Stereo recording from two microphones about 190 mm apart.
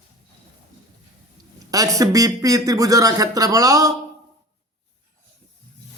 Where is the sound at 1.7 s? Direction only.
20° right (ahead or behind).